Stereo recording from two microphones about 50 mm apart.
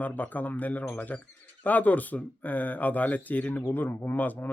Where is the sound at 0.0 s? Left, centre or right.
Left.